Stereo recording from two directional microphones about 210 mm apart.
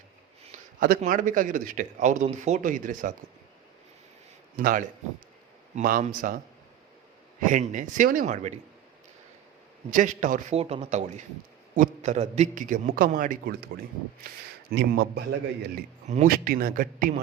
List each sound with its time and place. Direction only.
0.5 s a man's voice: 40° right (ahead or behind)
4.5 s a man's voice: 40° right (ahead or behind)
7.4 s a man's voice: 40° right (ahead or behind)
9.9 s a man's voice: 35° right (ahead or behind)
14.7 s a man's voice: 50° right (ahead or behind)
15.7 s a man's voice: 40° right (ahead or behind)